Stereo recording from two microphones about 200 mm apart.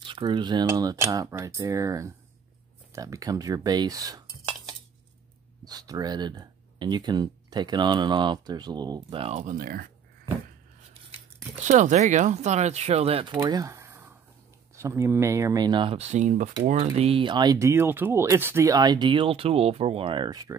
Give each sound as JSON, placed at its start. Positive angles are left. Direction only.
{"t": 0.0, "sound": "speech", "side_deg": -25}
{"t": 5.7, "sound": "speech", "side_deg": -20}
{"t": 11.6, "sound": "speech", "side_deg": -35}